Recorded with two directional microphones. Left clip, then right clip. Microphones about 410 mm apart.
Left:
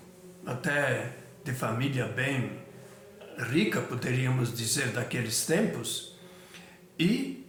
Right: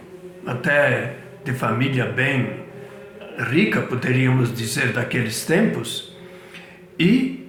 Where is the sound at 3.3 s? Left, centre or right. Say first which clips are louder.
Right 9 dB; left.